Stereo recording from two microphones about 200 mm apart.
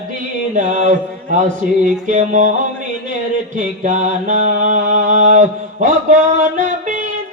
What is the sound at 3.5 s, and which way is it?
Mantra, 40° right (ahead or behind).